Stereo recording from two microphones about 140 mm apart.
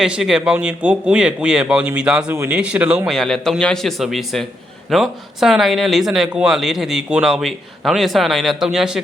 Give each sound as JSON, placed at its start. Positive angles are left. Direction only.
{"t": 0.0, "sound": "speech", "side_deg": -5}
{"t": 2.3, "sound": "speech", "side_deg": -20}
{"t": 3.1, "sound": "speech", "side_deg": 0}